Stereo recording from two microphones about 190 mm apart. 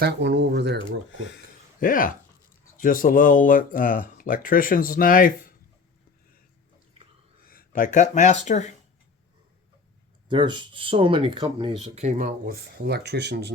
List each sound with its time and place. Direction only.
0.0 s speech: 65° right (ahead or behind)
1.8 s speech: 45° left (ahead or behind)
7.4 s speech: 45° left (ahead or behind)
10.2 s speech: 25° right (ahead or behind)
12.8 s speech: 60° right (ahead or behind)